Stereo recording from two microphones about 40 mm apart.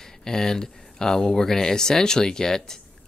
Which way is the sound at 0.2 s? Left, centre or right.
Centre.